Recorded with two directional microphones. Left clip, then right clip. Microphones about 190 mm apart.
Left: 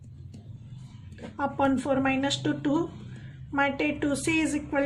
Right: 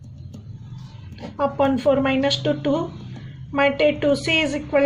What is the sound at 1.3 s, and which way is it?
A woman's voice, 45° left (ahead or behind).